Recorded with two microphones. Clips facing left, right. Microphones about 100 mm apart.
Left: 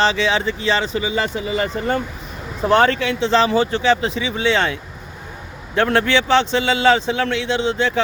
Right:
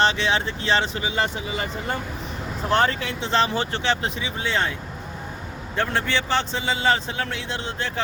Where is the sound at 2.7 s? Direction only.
85° left.